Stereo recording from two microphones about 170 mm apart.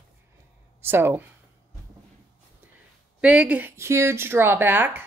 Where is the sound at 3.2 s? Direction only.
5° right (ahead or behind).